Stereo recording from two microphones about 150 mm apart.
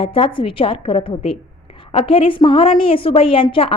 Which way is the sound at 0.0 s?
35° left (ahead or behind).